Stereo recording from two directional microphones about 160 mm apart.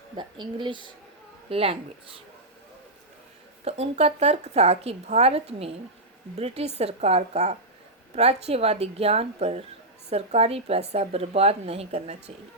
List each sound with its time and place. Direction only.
0.2 s speech: 30° right (ahead or behind)
3.6 s speech: 40° right (ahead or behind)